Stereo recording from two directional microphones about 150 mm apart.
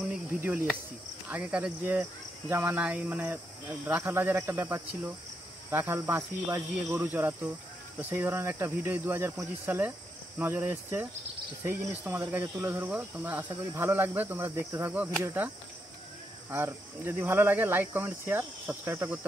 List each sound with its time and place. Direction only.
1.3 s speech: 10° right (ahead or behind)